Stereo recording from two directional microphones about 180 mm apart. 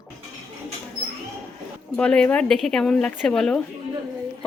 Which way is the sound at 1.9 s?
5° left (ahead or behind).